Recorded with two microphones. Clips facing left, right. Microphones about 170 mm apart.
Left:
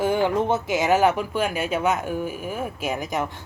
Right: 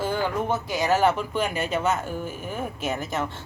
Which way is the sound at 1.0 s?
10° left (ahead or behind).